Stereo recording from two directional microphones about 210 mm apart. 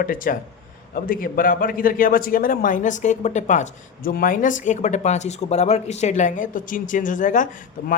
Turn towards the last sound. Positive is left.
turn(degrees=40)  # may be behind; listen again after turning